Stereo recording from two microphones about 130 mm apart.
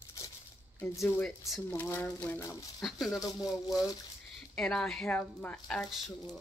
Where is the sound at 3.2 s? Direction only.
25° left (ahead or behind).